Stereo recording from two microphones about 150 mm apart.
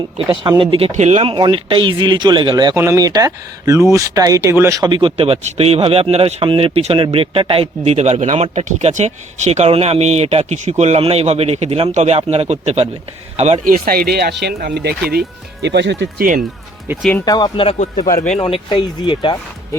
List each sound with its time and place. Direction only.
0.4 s speech: 30° right (ahead or behind)
0.9 s speech: 50° right (ahead or behind)
1.3 s speech: 35° right (ahead or behind)
2.7 s speech: 20° right (ahead or behind)
4.8 s speech: 30° right (ahead or behind)
13.7 s speech: 70° right (ahead or behind); by 15.2 s 90° right
16.1 s speech: 65° right (ahead or behind)
17.0 s speech: 10° left (ahead or behind)
17.2 s speech: 30° left (ahead or behind)
17.7 s speech: 60° left (ahead or behind)
18.3 s speech: 35° left (ahead or behind)